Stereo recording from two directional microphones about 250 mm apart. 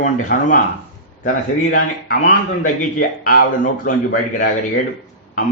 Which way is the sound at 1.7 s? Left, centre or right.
Left.